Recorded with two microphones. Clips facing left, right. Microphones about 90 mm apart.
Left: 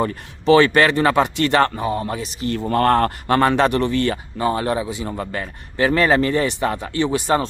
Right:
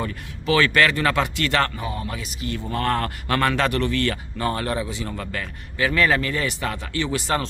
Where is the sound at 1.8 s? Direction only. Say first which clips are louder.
Left 7 dB; 35° left (ahead or behind).